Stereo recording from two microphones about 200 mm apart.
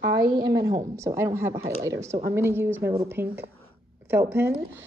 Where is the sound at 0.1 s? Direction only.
20° right (ahead or behind).